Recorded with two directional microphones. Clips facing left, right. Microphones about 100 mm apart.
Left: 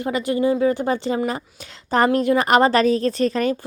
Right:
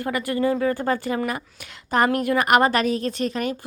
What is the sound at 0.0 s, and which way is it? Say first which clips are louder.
A woman's voice: left 3 dB; 20° left (ahead or behind).